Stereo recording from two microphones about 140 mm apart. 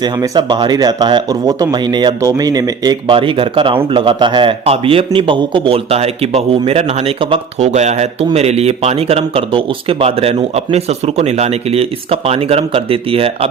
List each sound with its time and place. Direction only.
0.0 s speech: 30° right (ahead or behind)